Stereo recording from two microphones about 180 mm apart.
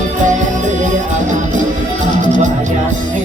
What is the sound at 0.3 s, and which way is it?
Music, 40° right (ahead or behind).